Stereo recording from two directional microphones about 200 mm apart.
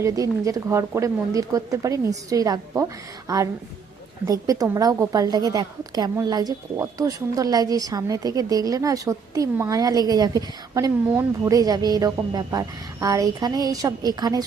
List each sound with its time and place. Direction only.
0.0 s a woman's voice: 15° right (ahead or behind)